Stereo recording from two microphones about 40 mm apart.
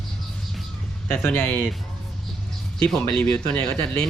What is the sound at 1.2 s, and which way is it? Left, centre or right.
Speech, left.